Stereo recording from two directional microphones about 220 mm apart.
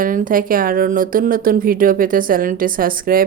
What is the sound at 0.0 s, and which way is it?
Speech, 40° right (ahead or behind).